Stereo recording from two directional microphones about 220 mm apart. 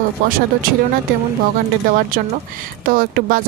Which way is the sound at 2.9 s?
40° right (ahead or behind).